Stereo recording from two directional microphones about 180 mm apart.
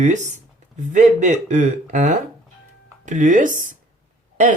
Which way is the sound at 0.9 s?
40° right (ahead or behind).